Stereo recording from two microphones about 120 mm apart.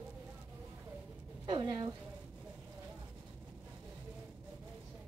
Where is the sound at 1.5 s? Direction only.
40° right (ahead or behind).